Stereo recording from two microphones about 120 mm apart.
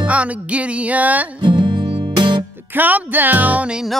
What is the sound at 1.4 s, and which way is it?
Music, 40° right (ahead or behind).